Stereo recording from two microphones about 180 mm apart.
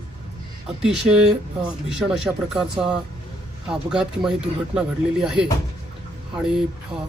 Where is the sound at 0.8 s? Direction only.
5° right (ahead or behind).